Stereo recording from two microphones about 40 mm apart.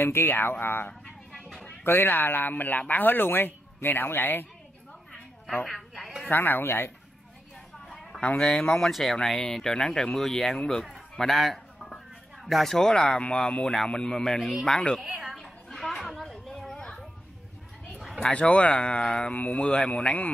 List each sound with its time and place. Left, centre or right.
0.0 s speech: left
5.7 s a sound: centre
6.3 s speech: left
7.9 s a sound: centre
8.4 s a man's voice: left
8.9 s speech: centre
10.6 s a man's voice: left
11.1 s a sound: centre
12.4 s speech: centre
12.7 s a man's voice: centre
15.7 s children playing: centre
18.3 s a man's voice: left
19.3 s a man's voice: left